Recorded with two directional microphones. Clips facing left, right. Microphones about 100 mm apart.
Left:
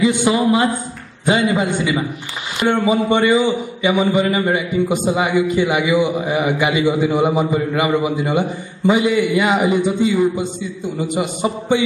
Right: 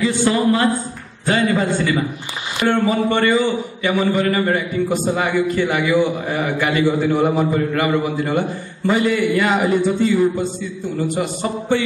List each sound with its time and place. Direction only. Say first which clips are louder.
0.0 s a man's voice: left 2 dB; 15° left (ahead or behind)